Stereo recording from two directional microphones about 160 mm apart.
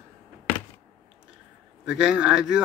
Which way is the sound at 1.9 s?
5° right (ahead or behind).